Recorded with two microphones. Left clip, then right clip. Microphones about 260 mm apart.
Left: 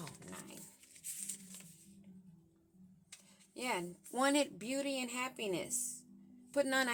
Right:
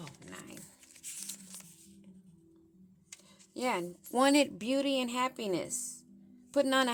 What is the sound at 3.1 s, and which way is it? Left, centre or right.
A woman's voice, right.